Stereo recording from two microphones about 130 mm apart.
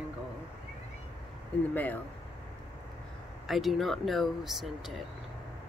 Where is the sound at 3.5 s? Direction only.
Centre (ahead or behind).